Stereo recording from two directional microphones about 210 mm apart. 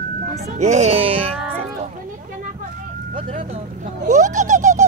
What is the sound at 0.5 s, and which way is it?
Speech, 35° right (ahead or behind).